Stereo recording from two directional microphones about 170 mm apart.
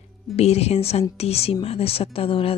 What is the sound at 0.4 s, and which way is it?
Speech, 35° left (ahead or behind).